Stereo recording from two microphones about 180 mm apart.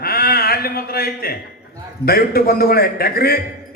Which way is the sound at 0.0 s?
55° left (ahead or behind).